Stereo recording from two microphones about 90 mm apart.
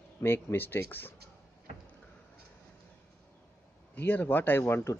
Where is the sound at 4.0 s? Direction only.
20° left (ahead or behind).